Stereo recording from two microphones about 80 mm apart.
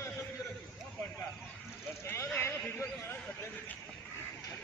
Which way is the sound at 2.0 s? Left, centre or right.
Left.